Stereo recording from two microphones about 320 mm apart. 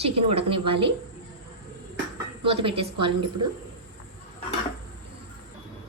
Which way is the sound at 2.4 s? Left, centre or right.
Centre.